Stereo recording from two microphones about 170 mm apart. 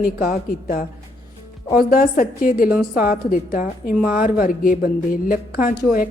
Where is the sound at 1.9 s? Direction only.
60° left (ahead or behind).